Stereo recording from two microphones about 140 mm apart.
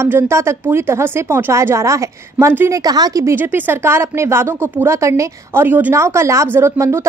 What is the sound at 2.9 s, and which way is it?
Speech, 30° right (ahead or behind).